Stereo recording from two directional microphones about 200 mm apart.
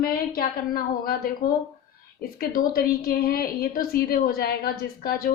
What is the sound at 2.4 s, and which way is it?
A woman's voice, 50° left (ahead or behind).